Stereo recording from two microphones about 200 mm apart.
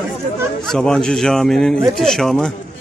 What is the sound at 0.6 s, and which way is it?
A man's voice, 5° left (ahead or behind).